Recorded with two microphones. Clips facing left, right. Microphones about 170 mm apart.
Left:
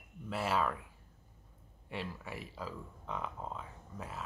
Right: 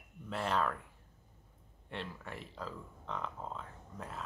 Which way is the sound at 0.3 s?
5° left (ahead or behind).